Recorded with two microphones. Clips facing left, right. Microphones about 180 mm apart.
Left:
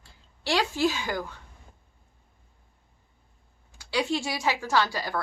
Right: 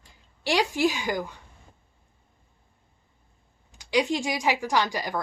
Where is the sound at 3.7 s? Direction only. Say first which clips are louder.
Right 3 dB; 15° right (ahead or behind).